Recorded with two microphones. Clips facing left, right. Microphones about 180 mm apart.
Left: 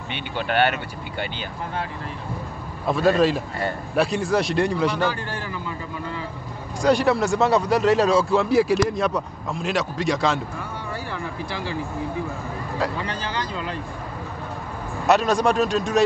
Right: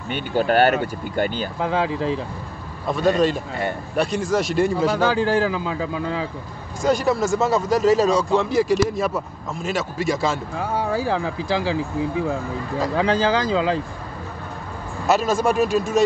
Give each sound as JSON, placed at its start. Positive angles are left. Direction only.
{"t": 0.1, "sound": "speech", "side_deg": -40}
{"t": 1.6, "sound": "speech", "side_deg": -90}
{"t": 2.9, "sound": "speech", "side_deg": 0}
{"t": 5.0, "sound": "speech", "side_deg": -90}
{"t": 6.8, "sound": "speech", "side_deg": 0}
{"t": 10.6, "sound": "speech", "side_deg": -90}
{"t": 12.9, "sound": "speech", "side_deg": -90}
{"t": 15.0, "sound": "speech", "side_deg": -5}